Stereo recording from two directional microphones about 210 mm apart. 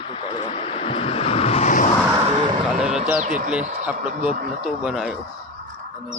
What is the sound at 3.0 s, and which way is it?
Speech, 35° right (ahead or behind).